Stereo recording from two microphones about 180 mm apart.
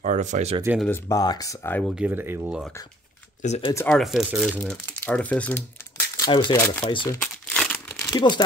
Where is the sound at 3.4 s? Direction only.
35° left (ahead or behind).